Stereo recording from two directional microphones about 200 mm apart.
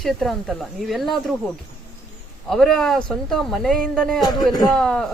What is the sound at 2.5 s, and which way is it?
Speech, centre (ahead or behind).